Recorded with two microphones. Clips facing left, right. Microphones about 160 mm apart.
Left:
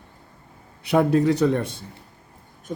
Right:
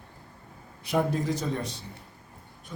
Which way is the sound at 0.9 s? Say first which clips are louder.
Left 8 dB; 70° left (ahead or behind).